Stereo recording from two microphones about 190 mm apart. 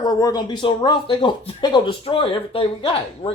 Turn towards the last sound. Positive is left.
turn(degrees=30)  # may be behind; listen again after turning